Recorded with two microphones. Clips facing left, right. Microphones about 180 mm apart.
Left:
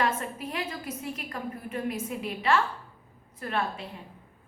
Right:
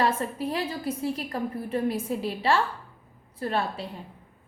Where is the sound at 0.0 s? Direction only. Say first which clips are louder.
Right 3 dB; 35° right (ahead or behind).